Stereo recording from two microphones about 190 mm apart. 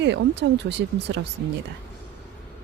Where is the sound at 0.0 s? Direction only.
65° right (ahead or behind).